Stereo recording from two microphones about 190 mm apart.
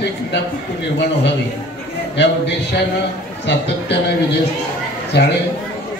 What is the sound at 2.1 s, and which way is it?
A man's voice, 65° left (ahead or behind).